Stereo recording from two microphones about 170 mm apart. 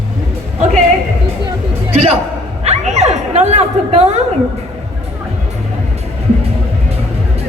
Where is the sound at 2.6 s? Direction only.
40° right (ahead or behind).